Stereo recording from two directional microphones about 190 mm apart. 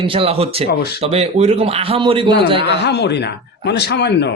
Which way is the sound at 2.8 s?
65° left (ahead or behind).